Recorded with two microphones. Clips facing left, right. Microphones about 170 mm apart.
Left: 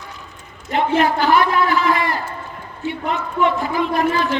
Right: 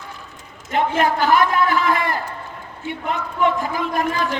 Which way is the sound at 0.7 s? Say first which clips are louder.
Left 2 dB; 45° right (ahead or behind).